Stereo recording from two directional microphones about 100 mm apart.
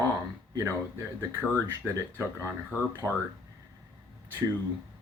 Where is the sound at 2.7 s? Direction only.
25° left (ahead or behind).